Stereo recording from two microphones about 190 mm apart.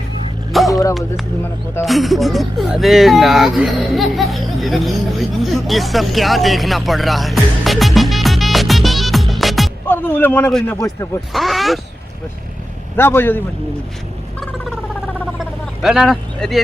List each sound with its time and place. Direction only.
0.7 s dog: 15° left (ahead or behind)
1.8 s a man's voice: centre (ahead or behind); by 11.2 s 15° left (ahead or behind)
11.3 s speech: centre (ahead or behind)
13.0 s a man's voice: 10° left (ahead or behind)
15.8 s speech: centre (ahead or behind)